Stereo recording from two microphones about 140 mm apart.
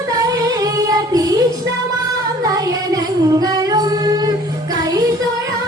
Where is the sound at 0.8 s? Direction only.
25° right (ahead or behind).